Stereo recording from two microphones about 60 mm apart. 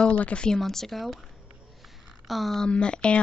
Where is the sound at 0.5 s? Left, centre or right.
Centre.